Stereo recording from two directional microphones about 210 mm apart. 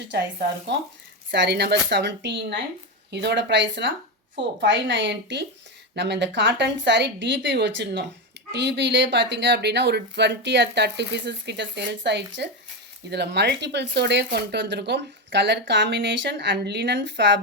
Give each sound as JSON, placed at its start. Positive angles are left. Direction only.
{"t": 0.7, "sound": "a woman's voice", "side_deg": -55}